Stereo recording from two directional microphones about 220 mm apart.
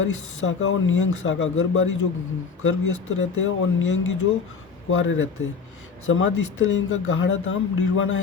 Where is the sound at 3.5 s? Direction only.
60° left (ahead or behind).